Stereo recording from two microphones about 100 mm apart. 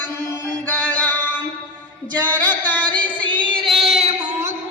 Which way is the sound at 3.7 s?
Centre (ahead or behind).